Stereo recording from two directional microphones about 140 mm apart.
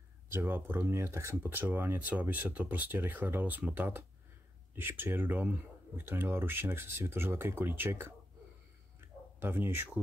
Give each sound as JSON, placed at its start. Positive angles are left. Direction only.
{"t": 0.3, "sound": "speech", "side_deg": -15}
{"t": 9.4, "sound": "speech", "side_deg": -15}